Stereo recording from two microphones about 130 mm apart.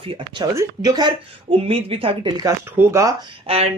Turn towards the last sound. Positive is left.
turn(degrees=-45)  # may be behind; listen again after turning